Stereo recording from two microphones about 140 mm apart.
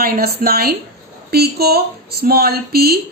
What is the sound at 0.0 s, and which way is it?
A woman's voice, 90° right.